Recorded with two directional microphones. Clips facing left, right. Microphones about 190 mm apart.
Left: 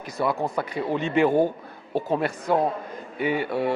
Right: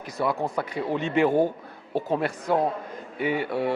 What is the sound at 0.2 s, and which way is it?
A man's voice, 20° left (ahead or behind).